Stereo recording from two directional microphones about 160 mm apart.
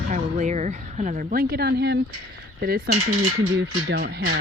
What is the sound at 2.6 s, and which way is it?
Cutlery, 70° right (ahead or behind).